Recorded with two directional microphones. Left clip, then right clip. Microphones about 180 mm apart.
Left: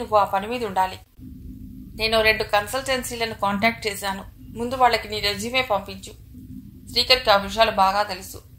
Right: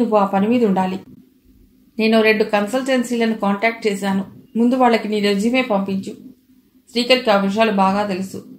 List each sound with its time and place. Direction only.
0.1 s speech: 30° left (ahead or behind)
2.0 s speech: 30° left (ahead or behind)